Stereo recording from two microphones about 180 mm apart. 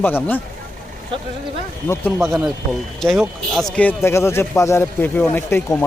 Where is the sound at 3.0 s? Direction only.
Centre (ahead or behind).